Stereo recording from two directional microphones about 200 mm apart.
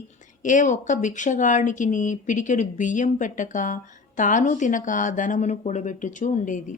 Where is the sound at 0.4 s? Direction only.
40° left (ahead or behind).